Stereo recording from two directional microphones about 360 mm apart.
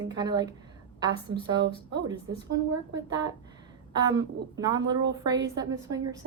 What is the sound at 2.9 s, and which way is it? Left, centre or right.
A woman's voice, centre.